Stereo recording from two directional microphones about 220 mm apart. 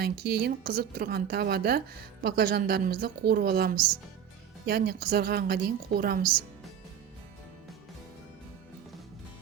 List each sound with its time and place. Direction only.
0.0 s a woman's voice: 45° right (ahead or behind)